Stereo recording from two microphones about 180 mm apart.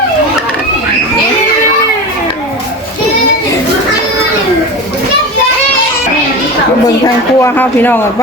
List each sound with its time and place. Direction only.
6.8 s speech: 15° left (ahead or behind)